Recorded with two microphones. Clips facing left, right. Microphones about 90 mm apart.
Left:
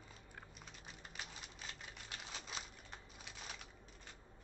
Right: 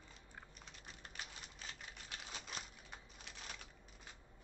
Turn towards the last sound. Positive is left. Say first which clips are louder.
# left 1 dB
turn(degrees=5)  # may be behind; listen again after turning